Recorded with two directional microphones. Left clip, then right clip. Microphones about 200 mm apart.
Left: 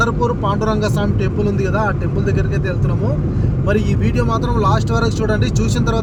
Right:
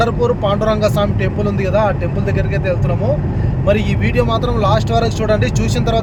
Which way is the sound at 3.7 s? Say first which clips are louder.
Right 2 dB; 5° right (ahead or behind).